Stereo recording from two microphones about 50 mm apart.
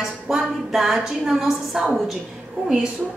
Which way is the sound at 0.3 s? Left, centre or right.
Centre.